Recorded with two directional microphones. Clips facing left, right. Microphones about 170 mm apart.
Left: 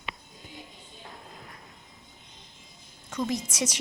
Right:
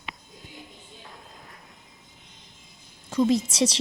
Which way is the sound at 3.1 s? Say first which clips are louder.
Right 8 dB; 30° right (ahead or behind).